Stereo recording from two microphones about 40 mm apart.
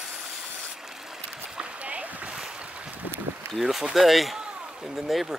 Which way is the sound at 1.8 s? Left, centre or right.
Right.